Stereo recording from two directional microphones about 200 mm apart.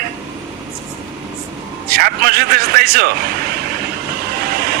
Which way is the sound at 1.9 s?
50° right (ahead or behind).